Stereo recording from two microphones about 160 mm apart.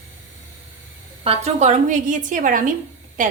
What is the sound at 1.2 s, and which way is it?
A woman's voice, 45° right (ahead or behind).